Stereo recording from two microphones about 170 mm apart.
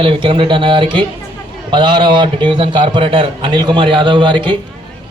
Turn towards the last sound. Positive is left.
turn(degrees=-30)  # may be behind; listen again after turning